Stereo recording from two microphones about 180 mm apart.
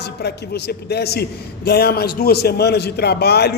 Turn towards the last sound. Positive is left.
turn(degrees=65)  # may be behind; listen again after turning